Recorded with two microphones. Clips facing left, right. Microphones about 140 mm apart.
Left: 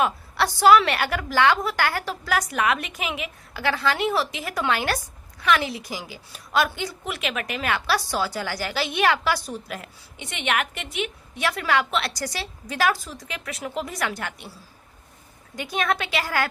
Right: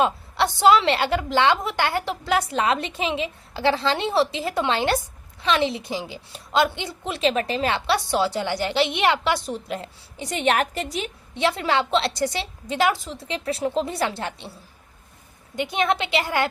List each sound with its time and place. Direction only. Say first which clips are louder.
0.0 s a woman's voice: right 2 dB; 20° right (ahead or behind)
15.5 s a woman's voice: right 3 dB; 20° right (ahead or behind)